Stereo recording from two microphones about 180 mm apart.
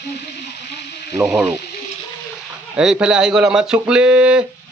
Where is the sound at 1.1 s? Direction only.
10° right (ahead or behind).